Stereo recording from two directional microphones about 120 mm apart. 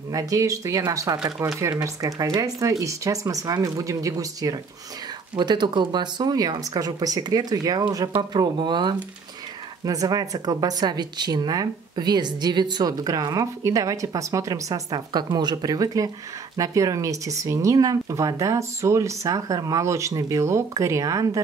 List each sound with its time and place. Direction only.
0.1 s speech: 30° right (ahead or behind)